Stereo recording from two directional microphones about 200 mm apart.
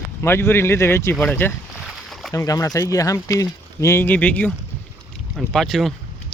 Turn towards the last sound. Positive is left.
turn(degrees=0)  # may be behind; listen again after turning